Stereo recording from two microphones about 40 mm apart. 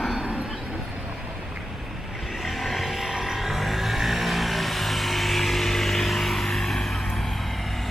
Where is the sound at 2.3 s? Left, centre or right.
Centre.